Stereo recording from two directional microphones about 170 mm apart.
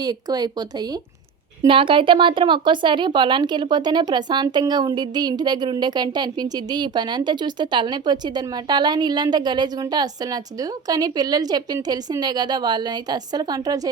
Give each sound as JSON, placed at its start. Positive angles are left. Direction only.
{"t": 0.0, "sound": "speech", "side_deg": -25}